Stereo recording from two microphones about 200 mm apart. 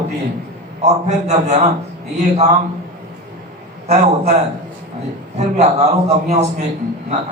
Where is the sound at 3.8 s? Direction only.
35° right (ahead or behind).